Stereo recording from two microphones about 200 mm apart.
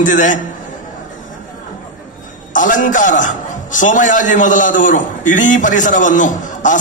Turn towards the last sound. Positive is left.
turn(degrees=40)  # may be behind; listen again after turning